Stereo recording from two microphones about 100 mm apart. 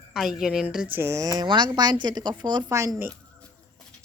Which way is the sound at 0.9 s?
30° right (ahead or behind).